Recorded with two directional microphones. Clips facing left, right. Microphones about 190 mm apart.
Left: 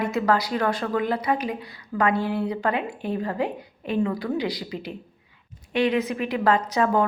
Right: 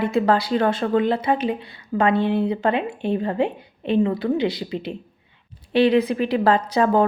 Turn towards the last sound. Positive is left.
turn(degrees=-30)  # may be behind; listen again after turning